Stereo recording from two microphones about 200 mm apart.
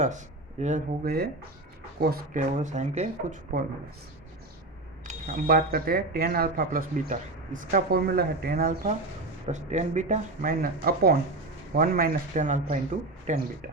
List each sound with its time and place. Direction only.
0.6 s speech: 45° right (ahead or behind)
5.0 s speech: 40° right (ahead or behind)